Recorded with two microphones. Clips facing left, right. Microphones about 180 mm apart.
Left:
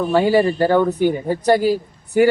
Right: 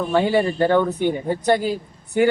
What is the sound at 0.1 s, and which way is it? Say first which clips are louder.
A man's voice: left 3 dB; 5° left (ahead or behind).